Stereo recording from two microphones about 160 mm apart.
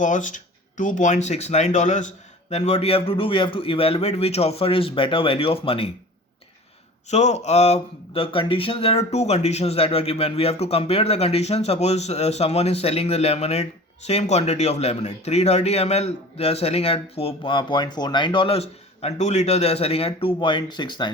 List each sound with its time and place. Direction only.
0.0 s speech: 50° left (ahead or behind); by 5.9 s 35° left (ahead or behind)
7.1 s speech: 45° left (ahead or behind); by 21.1 s 30° left (ahead or behind)